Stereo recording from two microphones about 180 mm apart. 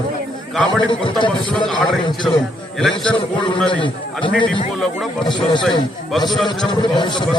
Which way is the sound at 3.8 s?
25° left (ahead or behind).